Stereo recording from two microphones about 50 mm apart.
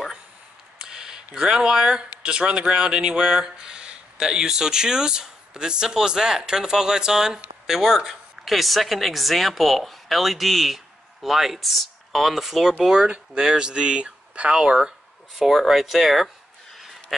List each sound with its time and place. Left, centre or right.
0.8 s speech: centre
13.0 s speech: right; by 16.3 s centre